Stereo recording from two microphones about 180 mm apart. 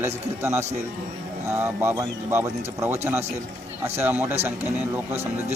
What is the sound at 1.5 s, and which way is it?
A man's voice, 15° right (ahead or behind).